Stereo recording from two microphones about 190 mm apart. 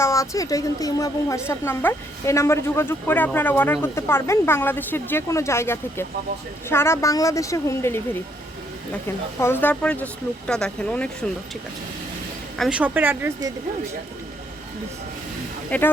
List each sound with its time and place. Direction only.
0.0 s speech: 15° left (ahead or behind)
9.4 s speech: 10° left (ahead or behind)
12.5 s speech: 5° right (ahead or behind)
15.7 s speech: 10° left (ahead or behind)